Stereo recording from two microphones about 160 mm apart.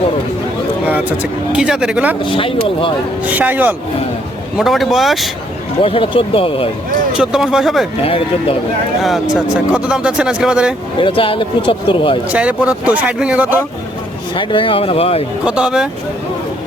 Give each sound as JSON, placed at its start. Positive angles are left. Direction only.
{"t": 0.9, "sound": "speech", "side_deg": -10}
{"t": 2.2, "sound": "speech", "side_deg": 35}
{"t": 3.2, "sound": "speech", "side_deg": -10}
{"t": 5.8, "sound": "speech", "side_deg": 35}
{"t": 7.2, "sound": "speech", "side_deg": -5}
{"t": 8.0, "sound": "speech", "side_deg": 35}
{"t": 9.0, "sound": "speech", "side_deg": 0}
{"t": 10.9, "sound": "speech", "side_deg": 35}
{"t": 12.3, "sound": "speech", "side_deg": -10}
{"t": 14.3, "sound": "speech", "side_deg": 30}
{"t": 15.4, "sound": "speech", "side_deg": -5}